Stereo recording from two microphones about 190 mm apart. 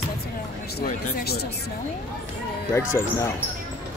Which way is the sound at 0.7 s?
55° left (ahead or behind).